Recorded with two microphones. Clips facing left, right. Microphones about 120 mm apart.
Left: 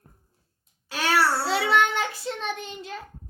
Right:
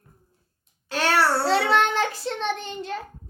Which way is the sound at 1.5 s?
5° left (ahead or behind).